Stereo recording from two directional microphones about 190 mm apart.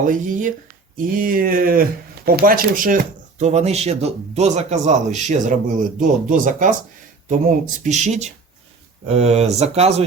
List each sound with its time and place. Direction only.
0.0 s speech: 45° right (ahead or behind)